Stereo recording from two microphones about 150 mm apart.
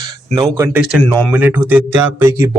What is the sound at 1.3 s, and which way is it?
Speech, 10° right (ahead or behind).